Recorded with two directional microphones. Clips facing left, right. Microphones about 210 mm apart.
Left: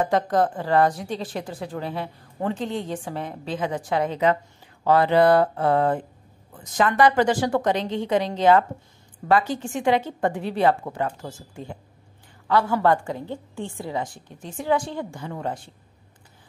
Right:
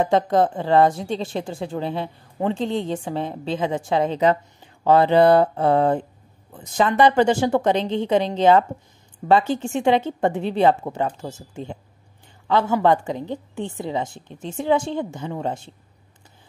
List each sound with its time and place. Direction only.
0.0 s speech: 25° right (ahead or behind)